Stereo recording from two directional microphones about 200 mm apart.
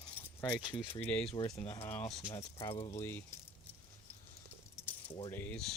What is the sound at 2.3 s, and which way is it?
Speech, 15° left (ahead or behind).